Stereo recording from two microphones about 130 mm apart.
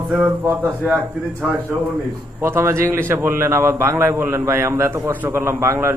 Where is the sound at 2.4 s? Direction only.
20° right (ahead or behind).